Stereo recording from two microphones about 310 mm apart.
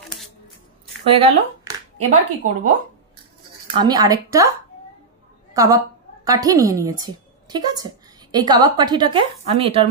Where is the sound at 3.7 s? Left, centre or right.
Centre.